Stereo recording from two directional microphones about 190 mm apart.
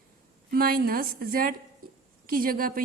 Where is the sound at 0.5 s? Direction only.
50° right (ahead or behind).